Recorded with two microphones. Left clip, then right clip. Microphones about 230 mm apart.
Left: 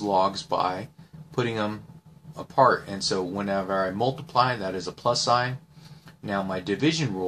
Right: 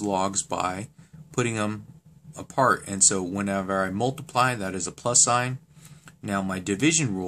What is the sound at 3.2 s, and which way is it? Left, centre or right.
Speech, right.